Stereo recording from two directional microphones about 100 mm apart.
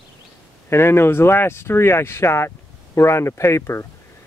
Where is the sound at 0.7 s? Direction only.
25° left (ahead or behind).